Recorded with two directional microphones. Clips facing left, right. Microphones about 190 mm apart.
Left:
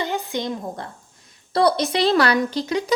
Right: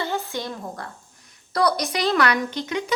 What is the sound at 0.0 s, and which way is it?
A woman's voice, 15° left (ahead or behind).